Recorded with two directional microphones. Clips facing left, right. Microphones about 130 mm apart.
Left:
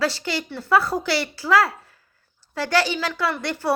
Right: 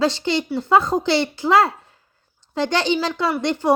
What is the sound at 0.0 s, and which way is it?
A woman's voice, 25° right (ahead or behind).